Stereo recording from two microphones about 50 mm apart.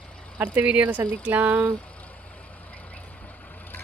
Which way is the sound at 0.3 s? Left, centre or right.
Right.